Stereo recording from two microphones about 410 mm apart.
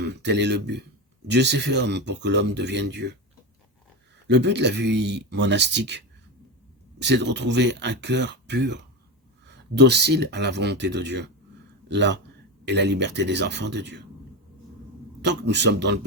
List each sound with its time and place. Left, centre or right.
0.0 s speech: right
4.3 s speech: right
7.0 s speech: right
15.2 s speech: right